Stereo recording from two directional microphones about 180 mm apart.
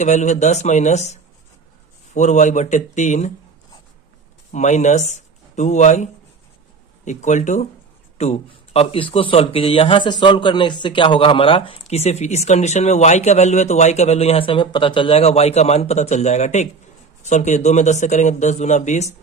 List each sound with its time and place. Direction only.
0.0 s speech: 40° left (ahead or behind)
4.5 s speech: 40° left (ahead or behind)